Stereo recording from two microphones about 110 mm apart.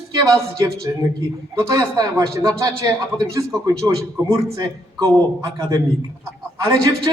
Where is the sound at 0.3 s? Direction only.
30° right (ahead or behind).